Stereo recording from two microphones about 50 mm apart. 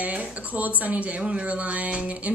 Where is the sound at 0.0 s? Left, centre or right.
Right.